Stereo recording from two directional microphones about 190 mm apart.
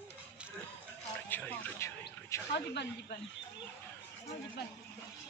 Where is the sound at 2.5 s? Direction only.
65° left (ahead or behind).